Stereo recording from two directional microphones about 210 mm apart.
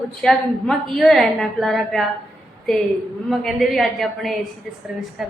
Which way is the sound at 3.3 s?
Centre (ahead or behind).